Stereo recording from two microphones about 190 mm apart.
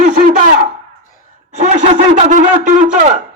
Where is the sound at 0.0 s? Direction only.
40° right (ahead or behind).